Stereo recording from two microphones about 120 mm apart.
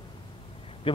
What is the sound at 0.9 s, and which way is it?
Speech, 45° left (ahead or behind).